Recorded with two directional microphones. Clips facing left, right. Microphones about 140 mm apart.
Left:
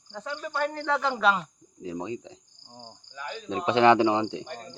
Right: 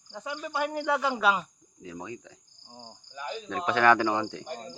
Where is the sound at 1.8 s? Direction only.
30° left (ahead or behind).